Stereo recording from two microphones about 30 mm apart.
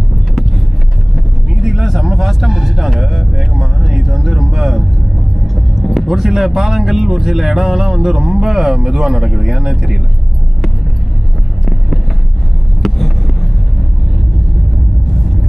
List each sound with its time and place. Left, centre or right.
1.1 s vehicle: centre
6.0 s speech: centre
12.8 s a sound: centre